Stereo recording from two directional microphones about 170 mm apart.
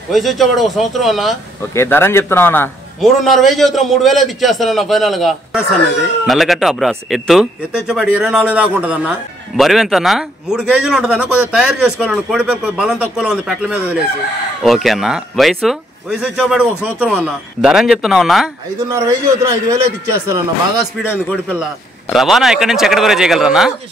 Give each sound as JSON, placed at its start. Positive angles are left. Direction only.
{"t": 0.1, "sound": "a man's voice", "side_deg": 0}
{"t": 1.8, "sound": "a man's voice", "side_deg": 15}
{"t": 3.0, "sound": "a man's voice", "side_deg": 0}
{"t": 18.9, "sound": "a man's voice", "side_deg": -20}
{"t": 21.0, "sound": "a man's voice", "side_deg": 10}
{"t": 22.1, "sound": "a man's voice", "side_deg": 0}